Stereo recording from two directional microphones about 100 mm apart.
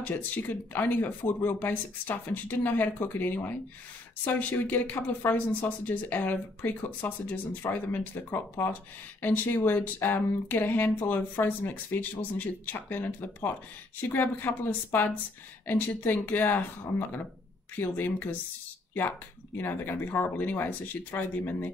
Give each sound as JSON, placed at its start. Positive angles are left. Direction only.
{"t": 0.0, "sound": "speech", "side_deg": 20}
{"t": 17.7, "sound": "speech", "side_deg": 20}